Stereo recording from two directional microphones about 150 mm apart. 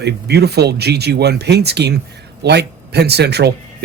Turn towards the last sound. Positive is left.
turn(degrees=-90)